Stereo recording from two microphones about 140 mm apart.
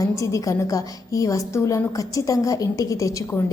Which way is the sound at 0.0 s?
20° left (ahead or behind).